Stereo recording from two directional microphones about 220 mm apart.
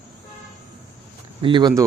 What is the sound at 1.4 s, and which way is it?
Speech, 20° right (ahead or behind).